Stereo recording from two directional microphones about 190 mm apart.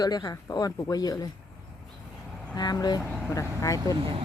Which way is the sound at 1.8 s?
5° left (ahead or behind).